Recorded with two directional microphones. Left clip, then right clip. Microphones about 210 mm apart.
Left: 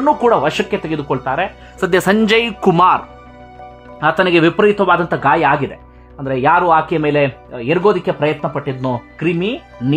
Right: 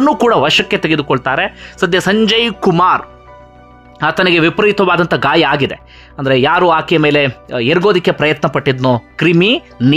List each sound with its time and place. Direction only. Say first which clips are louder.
0.0 s speech: right 2 dB; 30° right (ahead or behind)
1.8 s speech: right 2 dB; 5° right (ahead or behind)
4.0 s speech: right 1 dB; 15° right (ahead or behind)